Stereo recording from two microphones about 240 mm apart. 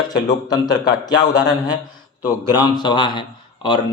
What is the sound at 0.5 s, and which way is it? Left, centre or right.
A man's voice, centre.